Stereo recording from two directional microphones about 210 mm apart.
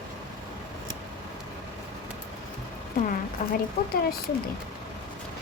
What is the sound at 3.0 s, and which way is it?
Speech, 45° left (ahead or behind).